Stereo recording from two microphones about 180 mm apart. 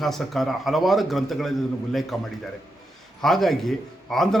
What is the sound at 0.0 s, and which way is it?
A man's voice, centre (ahead or behind).